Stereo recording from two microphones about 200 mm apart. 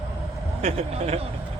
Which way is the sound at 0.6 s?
30° right (ahead or behind).